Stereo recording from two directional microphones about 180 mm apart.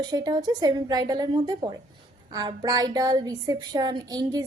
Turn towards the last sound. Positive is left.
turn(degrees=-20)  # may be behind; listen again after turning